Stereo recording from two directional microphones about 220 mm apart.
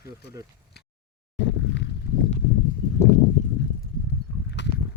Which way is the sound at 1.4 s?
55° left (ahead or behind).